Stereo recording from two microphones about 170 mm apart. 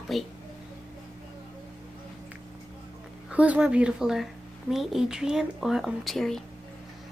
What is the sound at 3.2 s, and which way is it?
A woman's voice, 5° right (ahead or behind).